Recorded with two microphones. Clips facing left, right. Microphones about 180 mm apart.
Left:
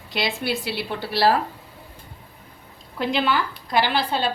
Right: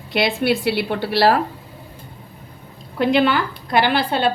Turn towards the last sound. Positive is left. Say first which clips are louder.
# right 5 dB
turn(degrees=-60)  # may be behind; listen again after turning